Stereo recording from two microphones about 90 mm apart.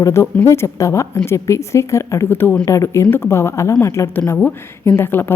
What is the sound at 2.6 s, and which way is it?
A woman's voice, 35° left (ahead or behind).